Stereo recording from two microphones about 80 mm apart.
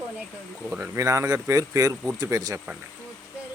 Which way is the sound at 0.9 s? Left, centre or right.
Right.